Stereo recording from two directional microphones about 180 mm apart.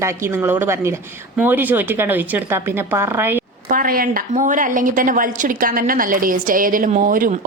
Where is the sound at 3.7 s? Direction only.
50° right (ahead or behind).